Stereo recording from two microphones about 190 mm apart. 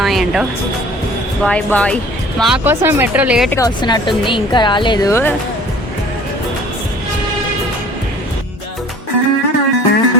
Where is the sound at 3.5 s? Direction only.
20° left (ahead or behind).